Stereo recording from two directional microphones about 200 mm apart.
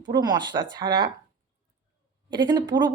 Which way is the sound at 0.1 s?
20° right (ahead or behind).